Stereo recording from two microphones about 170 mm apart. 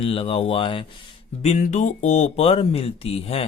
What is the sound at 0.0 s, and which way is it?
Speech, 30° left (ahead or behind).